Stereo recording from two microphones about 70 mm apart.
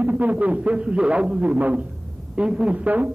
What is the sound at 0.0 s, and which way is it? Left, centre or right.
Speech, right.